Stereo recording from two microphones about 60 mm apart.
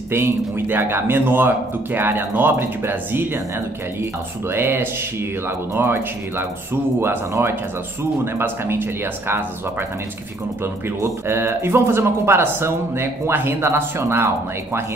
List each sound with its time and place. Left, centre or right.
0.1 s speech: right
11.2 s speech: right